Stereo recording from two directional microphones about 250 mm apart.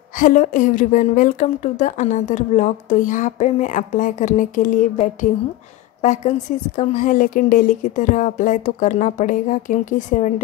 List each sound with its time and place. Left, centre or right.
0.2 s a woman's voice: left
6.8 s a woman's voice: left